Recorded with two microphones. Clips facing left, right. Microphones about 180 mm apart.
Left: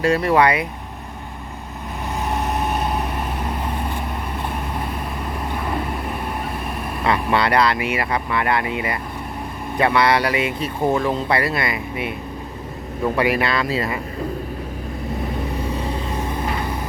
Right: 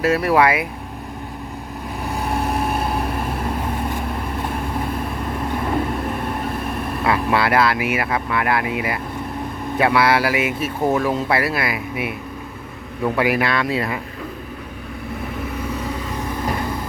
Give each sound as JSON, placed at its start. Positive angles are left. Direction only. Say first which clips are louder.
{"t": 0.0, "sound": "speech", "louder": "even", "side_deg": -5}
{"t": 2.3, "sound": "vehicle", "louder": "right 1 dB", "side_deg": -10}
{"t": 7.0, "sound": "speech", "louder": "even", "side_deg": -5}
{"t": 13.1, "sound": "speech", "louder": "right 1 dB", "side_deg": 0}
{"t": 15.6, "sound": "vehicle", "louder": "left 1 dB", "side_deg": 30}